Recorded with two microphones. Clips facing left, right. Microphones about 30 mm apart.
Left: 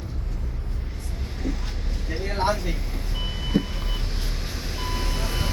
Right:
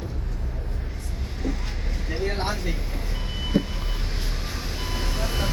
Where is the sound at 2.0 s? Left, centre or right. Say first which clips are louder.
Right 3 dB; centre.